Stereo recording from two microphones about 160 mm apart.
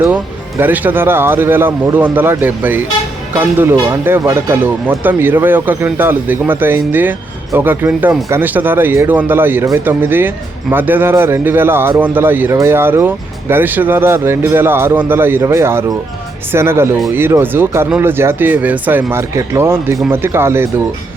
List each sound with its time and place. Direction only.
0.6 s speech: 10° right (ahead or behind)